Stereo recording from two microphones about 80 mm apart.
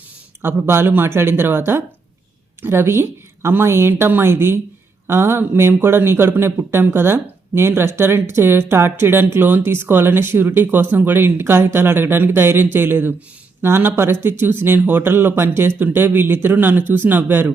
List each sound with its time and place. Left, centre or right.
0.4 s speech: right